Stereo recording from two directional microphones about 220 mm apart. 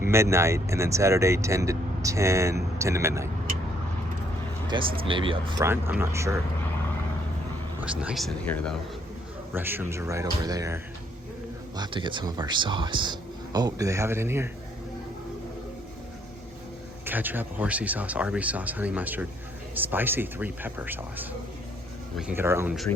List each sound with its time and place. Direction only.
0.0 s speech: 10° right (ahead or behind)
4.7 s speech: 25° right (ahead or behind)
7.8 s speech: 5° right (ahead or behind)
9.5 s speech: 10° right (ahead or behind)
11.8 s speech: 20° right (ahead or behind)
17.1 s speech: 10° right (ahead or behind)
22.3 s speech: 10° right (ahead or behind)